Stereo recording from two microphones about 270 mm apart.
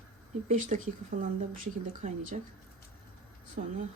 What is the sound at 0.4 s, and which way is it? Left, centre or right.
Speech, right.